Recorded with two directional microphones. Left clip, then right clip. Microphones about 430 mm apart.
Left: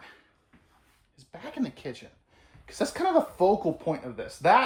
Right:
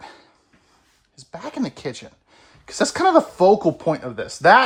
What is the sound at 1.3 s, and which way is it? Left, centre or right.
Speech, centre.